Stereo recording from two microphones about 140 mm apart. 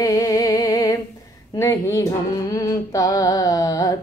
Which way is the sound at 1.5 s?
25° left (ahead or behind).